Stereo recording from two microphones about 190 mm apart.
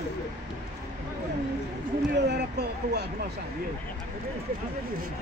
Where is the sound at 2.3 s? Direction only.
60° right (ahead or behind).